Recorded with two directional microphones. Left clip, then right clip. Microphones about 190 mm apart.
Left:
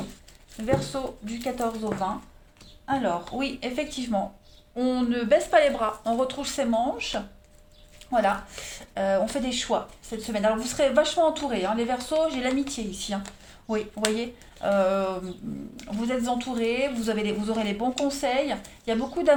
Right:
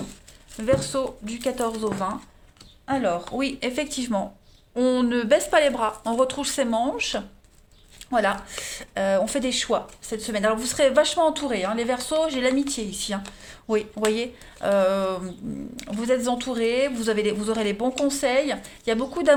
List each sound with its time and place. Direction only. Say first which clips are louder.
0.6 s speech: right 4 dB; 50° right (ahead or behind)